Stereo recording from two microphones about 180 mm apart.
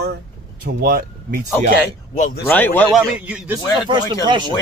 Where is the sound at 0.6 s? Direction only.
55° right (ahead or behind).